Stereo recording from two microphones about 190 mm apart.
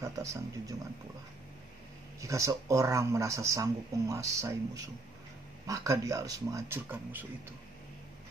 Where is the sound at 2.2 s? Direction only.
15° right (ahead or behind).